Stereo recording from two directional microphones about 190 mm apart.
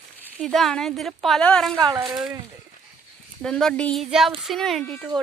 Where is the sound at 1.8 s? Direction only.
20° right (ahead or behind).